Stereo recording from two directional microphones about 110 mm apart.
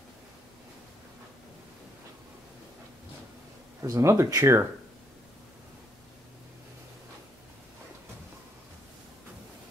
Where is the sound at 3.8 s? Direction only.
25° right (ahead or behind).